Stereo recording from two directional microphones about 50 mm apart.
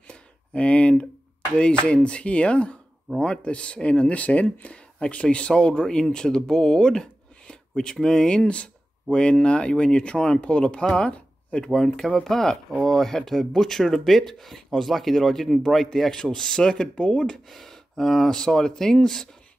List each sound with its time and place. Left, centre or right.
0.1 s a sound: left
1.6 s speech: left
17.5 s speech: centre